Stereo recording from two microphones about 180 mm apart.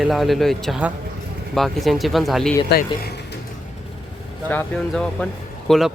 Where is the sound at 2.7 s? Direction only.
60° left (ahead or behind).